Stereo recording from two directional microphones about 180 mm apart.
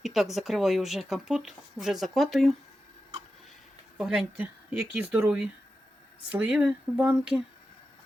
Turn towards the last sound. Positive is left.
turn(degrees=-5)  # may be behind; listen again after turning